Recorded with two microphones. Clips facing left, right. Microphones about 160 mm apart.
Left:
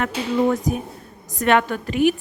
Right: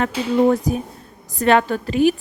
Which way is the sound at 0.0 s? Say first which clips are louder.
Right 3 dB; 30° right (ahead or behind).